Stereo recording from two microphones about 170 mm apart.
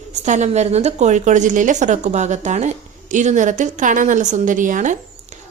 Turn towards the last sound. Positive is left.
turn(degrees=-50)  # may be behind; listen again after turning